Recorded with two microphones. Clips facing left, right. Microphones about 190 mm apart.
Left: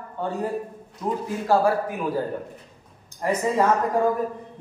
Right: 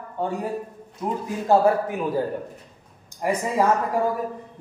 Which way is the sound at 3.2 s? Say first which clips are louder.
Left 1 dB; 10° right (ahead or behind).